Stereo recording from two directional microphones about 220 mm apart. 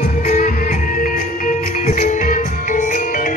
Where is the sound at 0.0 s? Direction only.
35° left (ahead or behind).